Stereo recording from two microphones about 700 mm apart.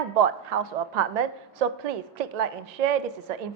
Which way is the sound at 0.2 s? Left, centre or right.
Right.